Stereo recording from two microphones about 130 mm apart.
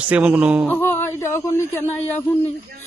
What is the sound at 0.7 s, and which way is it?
A man's voice, 15° left (ahead or behind).